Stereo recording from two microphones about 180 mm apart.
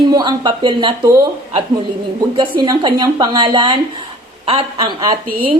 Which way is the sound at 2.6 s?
20° right (ahead or behind).